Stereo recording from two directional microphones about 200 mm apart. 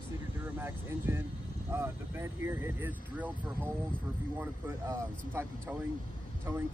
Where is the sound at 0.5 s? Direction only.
10° right (ahead or behind).